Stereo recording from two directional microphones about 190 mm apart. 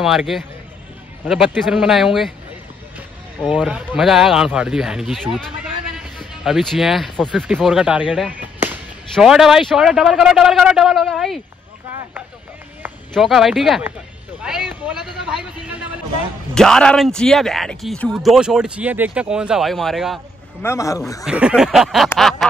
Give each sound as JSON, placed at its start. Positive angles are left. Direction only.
{"t": 0.0, "sound": "speech", "side_deg": 0}
{"t": 3.4, "sound": "speech", "side_deg": -5}
{"t": 13.1, "sound": "speech", "side_deg": 0}
{"t": 16.5, "sound": "speech", "side_deg": 5}
{"t": 20.6, "sound": "speech", "side_deg": 15}
{"t": 21.3, "sound": "speech", "side_deg": -5}